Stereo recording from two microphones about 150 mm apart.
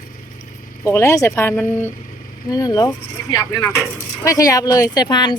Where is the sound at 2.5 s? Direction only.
25° left (ahead or behind).